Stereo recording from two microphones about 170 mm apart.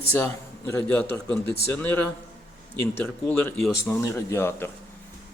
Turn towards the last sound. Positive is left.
turn(degrees=10)  # may be behind; listen again after turning